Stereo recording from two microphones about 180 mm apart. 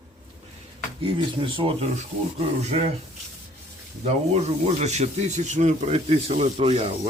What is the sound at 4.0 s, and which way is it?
Speech, 40° right (ahead or behind).